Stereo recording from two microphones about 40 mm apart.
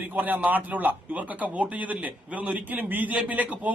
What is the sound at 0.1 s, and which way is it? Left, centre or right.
A man's voice, right.